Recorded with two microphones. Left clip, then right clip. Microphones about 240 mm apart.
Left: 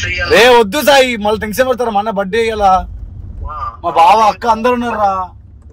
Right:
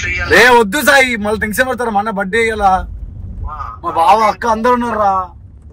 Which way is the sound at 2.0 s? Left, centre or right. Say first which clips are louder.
Even; left.